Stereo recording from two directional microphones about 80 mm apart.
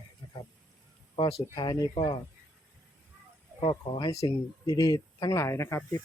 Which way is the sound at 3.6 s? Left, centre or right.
Left.